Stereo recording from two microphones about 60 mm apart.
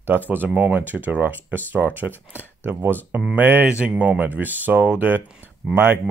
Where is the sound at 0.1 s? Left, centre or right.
Right.